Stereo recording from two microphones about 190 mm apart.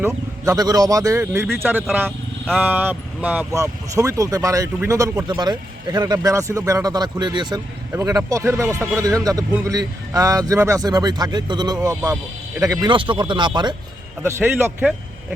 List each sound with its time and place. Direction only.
0.0 s speech: 20° right (ahead or behind)
14.2 s speech: 10° right (ahead or behind)